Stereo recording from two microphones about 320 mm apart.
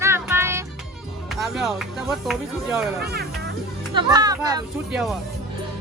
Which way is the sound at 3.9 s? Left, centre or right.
Centre.